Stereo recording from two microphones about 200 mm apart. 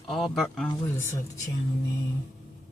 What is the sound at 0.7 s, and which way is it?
Speech, 15° left (ahead or behind).